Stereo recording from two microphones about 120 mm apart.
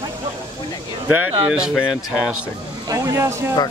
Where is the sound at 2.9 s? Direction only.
25° right (ahead or behind).